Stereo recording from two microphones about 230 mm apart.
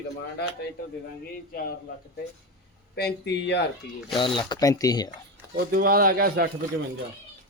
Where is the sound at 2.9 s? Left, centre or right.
Left.